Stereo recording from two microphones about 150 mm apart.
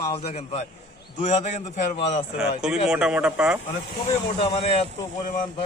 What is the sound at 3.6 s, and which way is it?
Speech, 50° left (ahead or behind).